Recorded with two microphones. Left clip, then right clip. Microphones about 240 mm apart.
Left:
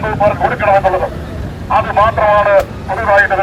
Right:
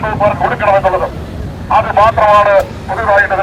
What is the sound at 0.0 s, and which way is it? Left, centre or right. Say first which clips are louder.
A man's voice: even; centre.